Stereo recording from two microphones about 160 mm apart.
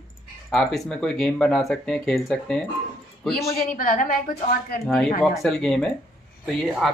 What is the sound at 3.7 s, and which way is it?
Speech, 60° left (ahead or behind).